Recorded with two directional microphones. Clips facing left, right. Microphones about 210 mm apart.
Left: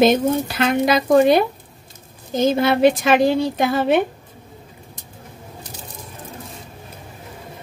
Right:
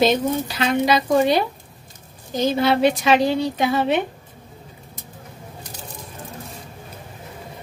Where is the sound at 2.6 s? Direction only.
50° left (ahead or behind).